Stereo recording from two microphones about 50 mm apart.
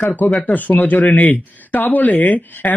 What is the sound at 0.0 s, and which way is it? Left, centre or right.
Speech, left.